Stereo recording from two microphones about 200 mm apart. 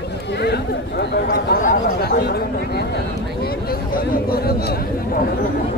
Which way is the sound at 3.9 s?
50° left (ahead or behind).